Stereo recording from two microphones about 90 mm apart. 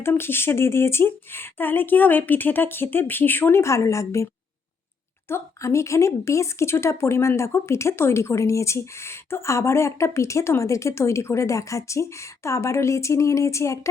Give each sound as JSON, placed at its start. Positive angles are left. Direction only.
{"t": 0.0, "sound": "speech", "side_deg": 25}
{"t": 5.3, "sound": "speech", "side_deg": 30}